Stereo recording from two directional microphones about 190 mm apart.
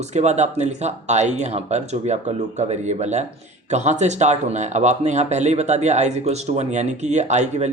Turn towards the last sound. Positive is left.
turn(degrees=-35)  # may be behind; listen again after turning